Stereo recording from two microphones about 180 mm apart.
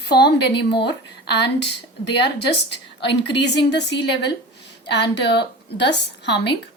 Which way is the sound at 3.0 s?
75° left (ahead or behind).